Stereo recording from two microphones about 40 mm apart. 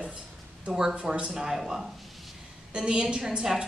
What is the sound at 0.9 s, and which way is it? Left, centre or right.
Speech, right.